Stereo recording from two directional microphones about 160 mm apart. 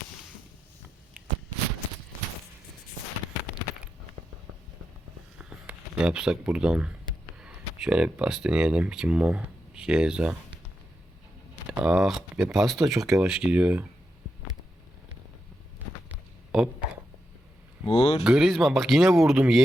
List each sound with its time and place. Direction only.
5.4 s a sound: 5° right (ahead or behind)
7.3 s speech: 5° right (ahead or behind)
11.7 s speech: 5° right (ahead or behind)
16.5 s a sound: 5° right (ahead or behind)
17.8 s speech: 40° left (ahead or behind)
18.2 s speech: 5° right (ahead or behind)